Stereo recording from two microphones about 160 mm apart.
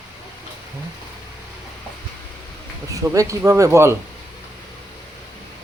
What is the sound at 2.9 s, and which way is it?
Speech, 20° right (ahead or behind).